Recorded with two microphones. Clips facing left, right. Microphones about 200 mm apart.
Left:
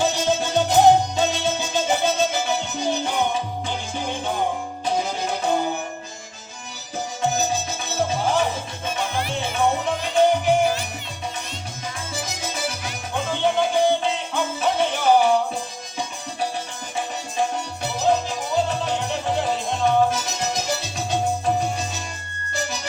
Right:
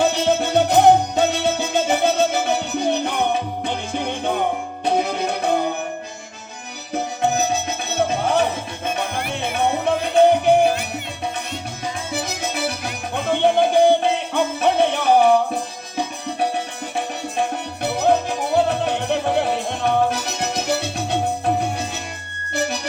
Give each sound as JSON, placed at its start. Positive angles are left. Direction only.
{"t": 0.0, "sound": "music", "side_deg": -60}
{"t": 6.9, "sound": "music", "side_deg": -60}
{"t": 12.1, "sound": "music", "side_deg": -60}